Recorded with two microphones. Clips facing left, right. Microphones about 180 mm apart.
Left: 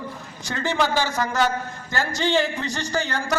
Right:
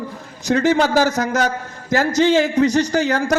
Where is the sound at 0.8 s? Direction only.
45° right (ahead or behind).